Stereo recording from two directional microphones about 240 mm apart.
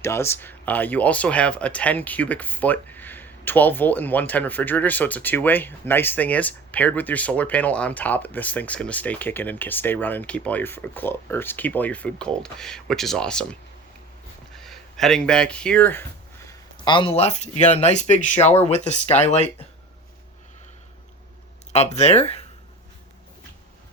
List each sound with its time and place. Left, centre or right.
0.0 s speech: centre
16.5 s speech: centre
21.7 s speech: left